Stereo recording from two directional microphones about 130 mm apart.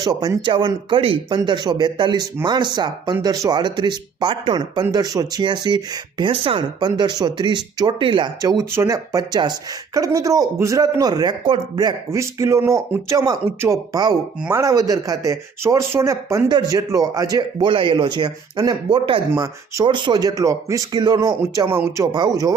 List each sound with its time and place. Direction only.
0.0 s speech: 30° right (ahead or behind)
8.4 s speech: 30° right (ahead or behind)
12.1 s speech: 20° right (ahead or behind)